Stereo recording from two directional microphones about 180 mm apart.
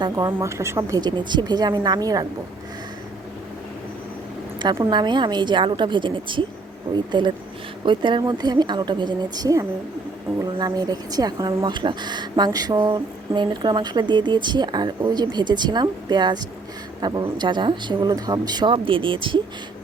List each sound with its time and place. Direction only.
0.0 s speech: 25° right (ahead or behind)
4.6 s speech: 25° right (ahead or behind)